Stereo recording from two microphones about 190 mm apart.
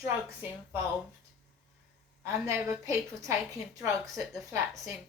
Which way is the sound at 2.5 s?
15° right (ahead or behind).